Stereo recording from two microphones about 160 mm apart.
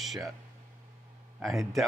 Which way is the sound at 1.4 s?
Centre (ahead or behind).